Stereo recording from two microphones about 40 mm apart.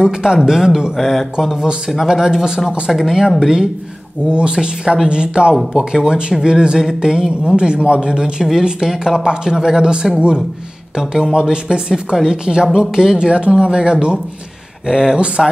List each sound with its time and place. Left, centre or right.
0.0 s speech: centre
0.9 s speech: centre
4.3 s a man's voice: right
11.3 s a man's voice: right